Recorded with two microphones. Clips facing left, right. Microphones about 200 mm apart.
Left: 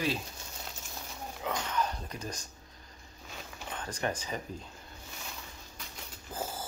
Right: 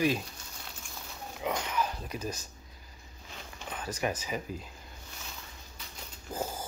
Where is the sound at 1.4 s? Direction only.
10° right (ahead or behind).